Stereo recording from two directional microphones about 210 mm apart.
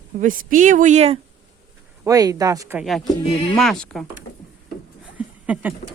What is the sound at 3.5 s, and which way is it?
Speech, centre (ahead or behind).